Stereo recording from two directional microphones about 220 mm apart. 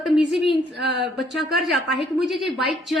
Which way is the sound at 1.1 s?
Centre (ahead or behind).